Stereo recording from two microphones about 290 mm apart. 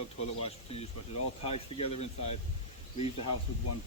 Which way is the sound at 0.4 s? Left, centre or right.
Left.